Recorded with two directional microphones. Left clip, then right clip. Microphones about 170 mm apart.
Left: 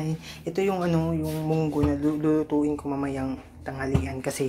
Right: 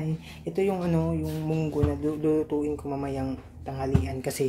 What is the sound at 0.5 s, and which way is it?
Speech, 10° right (ahead or behind).